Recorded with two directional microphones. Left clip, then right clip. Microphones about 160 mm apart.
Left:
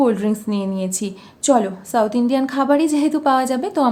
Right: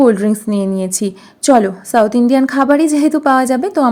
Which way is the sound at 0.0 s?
30° right (ahead or behind).